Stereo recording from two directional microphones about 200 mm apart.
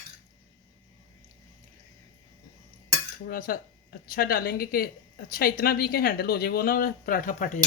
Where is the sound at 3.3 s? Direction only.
45° left (ahead or behind).